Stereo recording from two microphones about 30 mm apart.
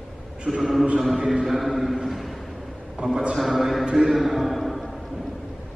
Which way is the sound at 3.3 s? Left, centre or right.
Centre.